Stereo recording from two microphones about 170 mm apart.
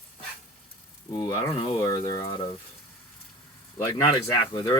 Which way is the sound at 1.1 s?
20° left (ahead or behind).